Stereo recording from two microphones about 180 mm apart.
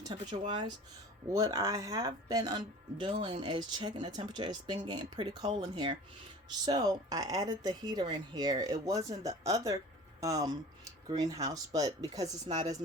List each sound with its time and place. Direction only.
0.0 s speech: 25° right (ahead or behind)